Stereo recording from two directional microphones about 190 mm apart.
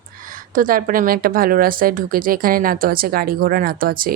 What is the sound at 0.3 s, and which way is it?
A woman's voice, 45° right (ahead or behind).